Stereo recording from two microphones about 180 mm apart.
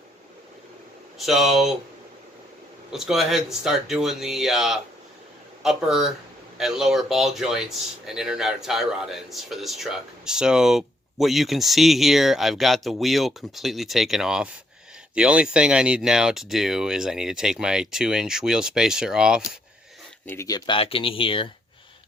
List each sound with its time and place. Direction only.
1.2 s speech: centre (ahead or behind)
2.9 s speech: centre (ahead or behind)
20.2 s speech: 15° left (ahead or behind)
20.7 s speech: 30° left (ahead or behind)